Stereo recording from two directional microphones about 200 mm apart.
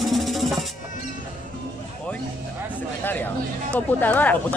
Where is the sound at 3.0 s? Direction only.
10° left (ahead or behind).